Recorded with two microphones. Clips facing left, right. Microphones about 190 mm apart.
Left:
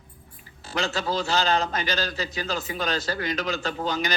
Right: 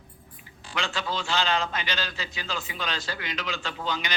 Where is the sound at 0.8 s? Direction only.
40° left (ahead or behind).